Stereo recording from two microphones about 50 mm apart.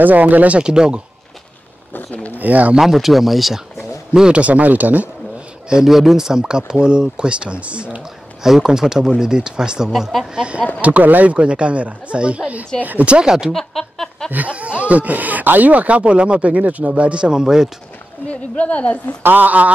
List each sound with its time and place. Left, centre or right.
0.0 s speech: right
0.6 s speech: centre
2.3 s speech: right
2.8 s speech: centre
4.1 s a man's voice: centre
4.4 s speech: right
5.9 s speech: centre; by 8.0 s right
8.4 s speech: centre
10.3 s speech: right
13.5 s a sound: centre
14.3 s speech: right; by 17.6 s centre
18.2 s speech: left
19.2 s speech: right